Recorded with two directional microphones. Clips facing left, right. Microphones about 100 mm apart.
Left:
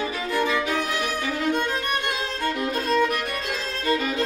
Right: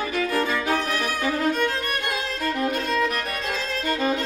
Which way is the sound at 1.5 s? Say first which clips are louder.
Right 1 dB; 20° left (ahead or behind).